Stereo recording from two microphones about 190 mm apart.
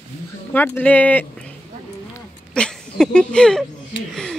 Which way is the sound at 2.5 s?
5° left (ahead or behind).